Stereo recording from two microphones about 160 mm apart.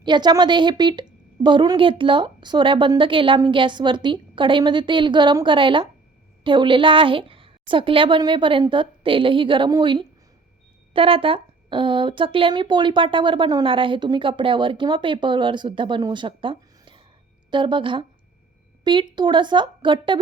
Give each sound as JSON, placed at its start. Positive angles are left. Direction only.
{"t": 0.0, "sound": "a woman's voice", "side_deg": -25}